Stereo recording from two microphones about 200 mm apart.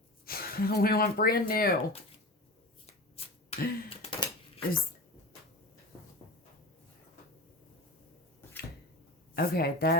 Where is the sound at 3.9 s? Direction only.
30° left (ahead or behind).